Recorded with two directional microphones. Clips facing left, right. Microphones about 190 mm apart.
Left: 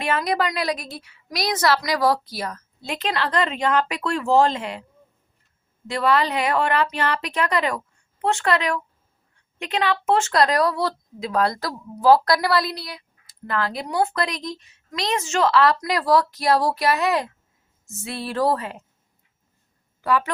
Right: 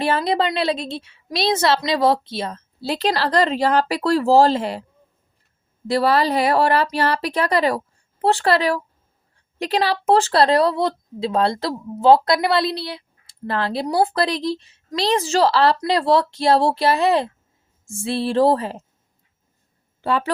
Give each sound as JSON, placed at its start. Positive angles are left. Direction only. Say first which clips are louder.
{"t": 0.0, "sound": "speech", "louder": "right 3 dB", "side_deg": -30}
{"t": 5.9, "sound": "speech", "louder": "right 3 dB", "side_deg": -35}
{"t": 20.0, "sound": "speech", "louder": "right 1 dB", "side_deg": -30}